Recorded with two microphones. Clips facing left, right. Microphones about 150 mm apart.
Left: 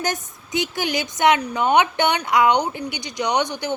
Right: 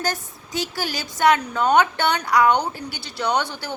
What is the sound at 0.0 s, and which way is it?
A woman's voice, 20° left (ahead or behind).